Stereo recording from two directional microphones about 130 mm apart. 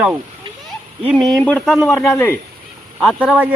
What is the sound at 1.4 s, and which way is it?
Speech, 10° left (ahead or behind).